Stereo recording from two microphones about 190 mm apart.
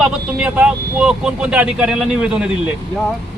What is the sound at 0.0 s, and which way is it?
Speech, 5° right (ahead or behind).